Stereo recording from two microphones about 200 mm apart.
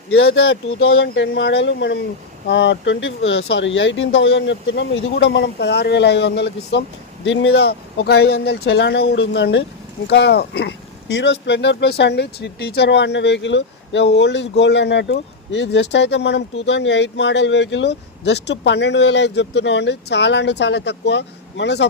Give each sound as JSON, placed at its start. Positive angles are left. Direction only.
{"t": 0.3, "sound": "speech", "side_deg": 90}